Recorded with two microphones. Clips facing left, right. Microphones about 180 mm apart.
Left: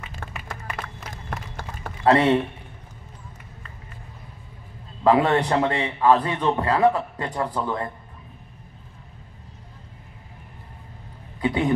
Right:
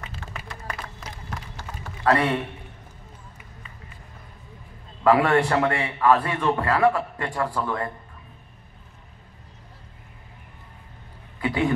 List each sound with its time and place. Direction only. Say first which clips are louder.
0.5 s run: left 2 dB; 50° left (ahead or behind)
2.0 s a man's voice: left 4 dB; 25° left (ahead or behind)
5.0 s a man's voice: even; 20° left (ahead or behind)
11.4 s a sound: left 1 dB; 20° left (ahead or behind)